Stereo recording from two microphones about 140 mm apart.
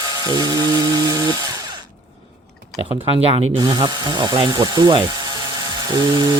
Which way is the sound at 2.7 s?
35° right (ahead or behind).